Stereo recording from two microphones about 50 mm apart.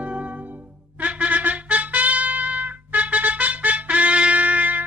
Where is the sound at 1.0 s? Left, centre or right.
Right.